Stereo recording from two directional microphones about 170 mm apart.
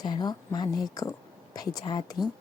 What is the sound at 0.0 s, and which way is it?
A woman's voice, 25° left (ahead or behind).